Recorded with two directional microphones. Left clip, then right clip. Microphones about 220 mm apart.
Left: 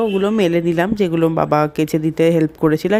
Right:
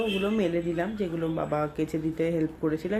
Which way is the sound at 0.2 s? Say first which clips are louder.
Left 11 dB; 45° left (ahead or behind).